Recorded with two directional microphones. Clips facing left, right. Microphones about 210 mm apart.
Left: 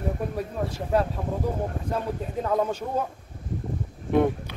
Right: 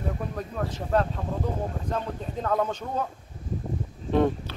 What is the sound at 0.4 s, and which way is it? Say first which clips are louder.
Speech: left 2 dB; 10° left (ahead or behind).